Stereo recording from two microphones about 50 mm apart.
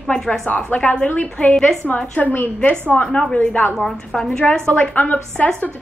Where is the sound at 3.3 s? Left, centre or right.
Left.